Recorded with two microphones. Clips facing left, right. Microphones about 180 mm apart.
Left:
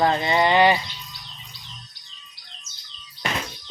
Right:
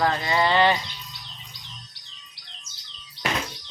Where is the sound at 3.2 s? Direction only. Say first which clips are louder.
Right 1 dB; 5° right (ahead or behind).